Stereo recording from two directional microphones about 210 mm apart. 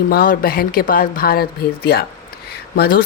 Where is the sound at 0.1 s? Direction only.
45° left (ahead or behind).